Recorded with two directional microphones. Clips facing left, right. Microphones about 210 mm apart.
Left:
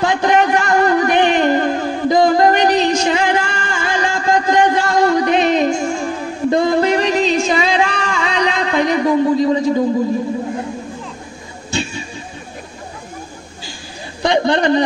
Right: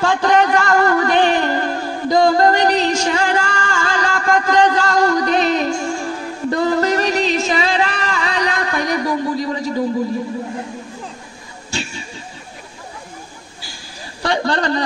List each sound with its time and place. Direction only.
0.0 s music: 20° left (ahead or behind)
11.7 s a sound: 20° left (ahead or behind)
14.2 s a man's voice: 20° left (ahead or behind)